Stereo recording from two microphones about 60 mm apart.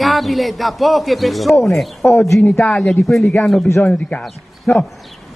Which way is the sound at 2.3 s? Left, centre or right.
Left.